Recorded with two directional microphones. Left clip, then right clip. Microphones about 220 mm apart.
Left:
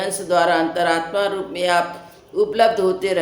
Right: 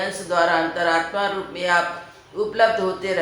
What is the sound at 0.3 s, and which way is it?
Speech, 50° left (ahead or behind).